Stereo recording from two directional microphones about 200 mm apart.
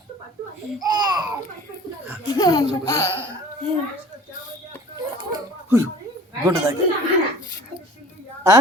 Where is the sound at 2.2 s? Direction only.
15° left (ahead or behind).